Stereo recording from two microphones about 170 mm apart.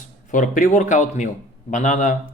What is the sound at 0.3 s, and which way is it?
Speech, 50° left (ahead or behind).